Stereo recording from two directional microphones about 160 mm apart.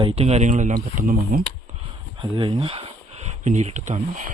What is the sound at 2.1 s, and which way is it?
Speech, 30° right (ahead or behind).